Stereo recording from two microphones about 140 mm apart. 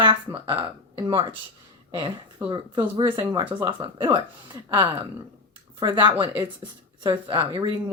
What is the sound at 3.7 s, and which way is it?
Speech, 20° right (ahead or behind).